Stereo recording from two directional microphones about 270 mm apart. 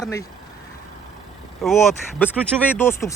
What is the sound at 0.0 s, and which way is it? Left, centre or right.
Speech, centre.